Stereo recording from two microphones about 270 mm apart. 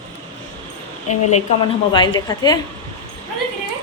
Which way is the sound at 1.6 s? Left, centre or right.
Centre.